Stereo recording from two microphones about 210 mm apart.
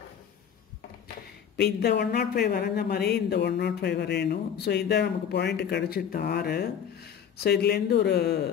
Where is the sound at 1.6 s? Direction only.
50° left (ahead or behind).